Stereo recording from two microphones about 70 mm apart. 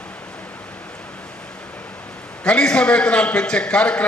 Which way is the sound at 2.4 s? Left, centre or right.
Centre.